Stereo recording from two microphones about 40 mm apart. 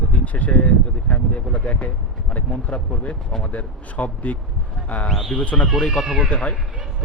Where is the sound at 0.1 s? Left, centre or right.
Left.